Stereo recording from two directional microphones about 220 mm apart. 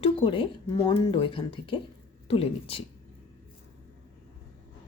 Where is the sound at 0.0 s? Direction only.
25° left (ahead or behind).